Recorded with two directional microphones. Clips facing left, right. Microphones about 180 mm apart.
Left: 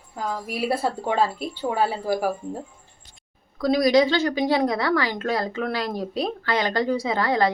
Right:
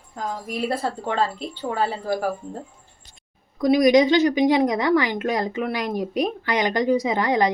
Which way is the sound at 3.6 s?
20° right (ahead or behind).